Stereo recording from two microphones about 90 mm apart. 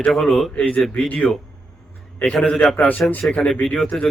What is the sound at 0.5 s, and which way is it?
Speech, 15° left (ahead or behind).